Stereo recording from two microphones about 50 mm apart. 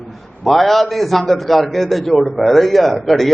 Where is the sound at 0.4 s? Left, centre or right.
Centre.